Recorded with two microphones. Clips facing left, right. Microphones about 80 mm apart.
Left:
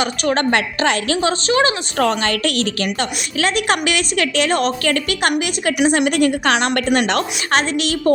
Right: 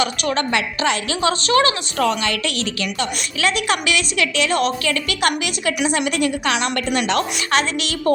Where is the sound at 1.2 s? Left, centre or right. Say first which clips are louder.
Right 1 dB; left.